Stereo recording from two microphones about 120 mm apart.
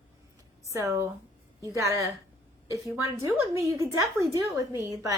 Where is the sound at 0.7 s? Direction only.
25° right (ahead or behind).